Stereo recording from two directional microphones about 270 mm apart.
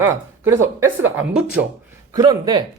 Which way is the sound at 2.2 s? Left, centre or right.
Centre.